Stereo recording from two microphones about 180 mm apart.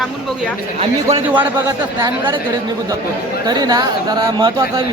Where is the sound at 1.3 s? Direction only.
15° right (ahead or behind).